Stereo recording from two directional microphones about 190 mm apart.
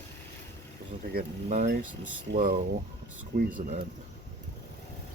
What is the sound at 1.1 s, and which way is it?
Speech, 45° right (ahead or behind).